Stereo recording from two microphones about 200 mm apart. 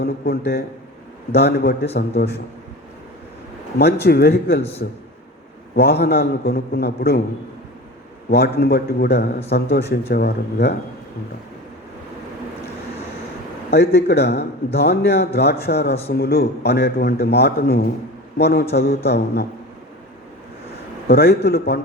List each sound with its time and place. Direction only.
0.0 s a man's voice: 55° left (ahead or behind)
4.0 s a man's voice: 55° left (ahead or behind)
5.7 s a man's voice: 55° left (ahead or behind)
8.3 s a man's voice: 55° left (ahead or behind)
13.7 s a man's voice: 55° left (ahead or behind)
21.1 s a man's voice: 50° left (ahead or behind)